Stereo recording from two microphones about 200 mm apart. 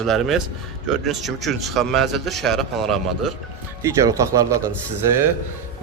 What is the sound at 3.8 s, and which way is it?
Speech, 15° right (ahead or behind).